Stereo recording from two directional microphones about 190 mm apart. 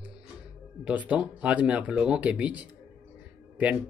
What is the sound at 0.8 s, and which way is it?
Speech, 10° right (ahead or behind).